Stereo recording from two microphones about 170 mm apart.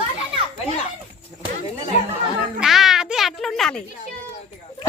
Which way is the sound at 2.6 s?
Centre (ahead or behind).